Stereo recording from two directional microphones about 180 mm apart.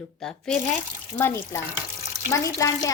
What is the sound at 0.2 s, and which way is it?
Speech, 5° left (ahead or behind).